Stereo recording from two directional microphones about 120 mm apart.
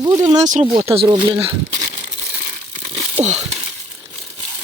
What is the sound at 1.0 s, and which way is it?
Speech, 40° right (ahead or behind).